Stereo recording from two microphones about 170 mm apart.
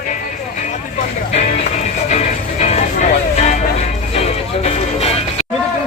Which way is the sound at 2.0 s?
45° left (ahead or behind).